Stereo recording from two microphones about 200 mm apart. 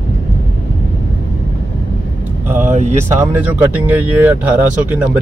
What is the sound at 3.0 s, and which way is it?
Speech, 15° right (ahead or behind).